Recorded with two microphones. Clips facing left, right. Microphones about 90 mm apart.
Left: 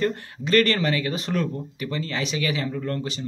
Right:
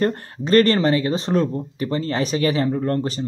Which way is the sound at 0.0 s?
40° right (ahead or behind).